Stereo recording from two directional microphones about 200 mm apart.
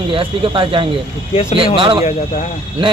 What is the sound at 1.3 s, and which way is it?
Speech, 30° left (ahead or behind).